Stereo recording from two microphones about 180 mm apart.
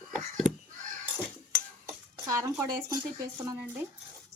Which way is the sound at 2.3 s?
20° right (ahead or behind).